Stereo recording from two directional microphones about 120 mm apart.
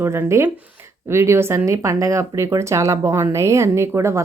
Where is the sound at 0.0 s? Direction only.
20° right (ahead or behind).